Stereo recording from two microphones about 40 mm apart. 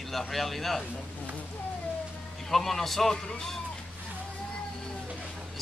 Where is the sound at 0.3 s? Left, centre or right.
Centre.